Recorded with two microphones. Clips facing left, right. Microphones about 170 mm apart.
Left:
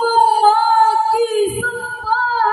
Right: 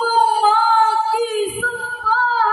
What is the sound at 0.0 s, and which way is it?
Music, 45° left (ahead or behind).